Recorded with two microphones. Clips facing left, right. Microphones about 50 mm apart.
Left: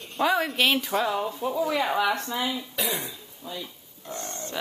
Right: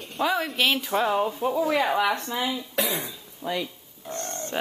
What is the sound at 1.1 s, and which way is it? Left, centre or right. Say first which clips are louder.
Speech: right 3 dB; centre.